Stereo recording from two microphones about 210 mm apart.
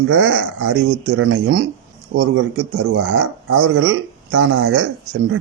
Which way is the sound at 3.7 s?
60° right (ahead or behind).